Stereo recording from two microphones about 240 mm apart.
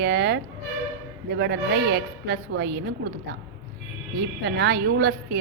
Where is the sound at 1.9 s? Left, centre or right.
Right.